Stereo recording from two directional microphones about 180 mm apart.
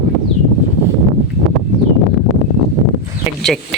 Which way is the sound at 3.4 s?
Centre (ahead or behind).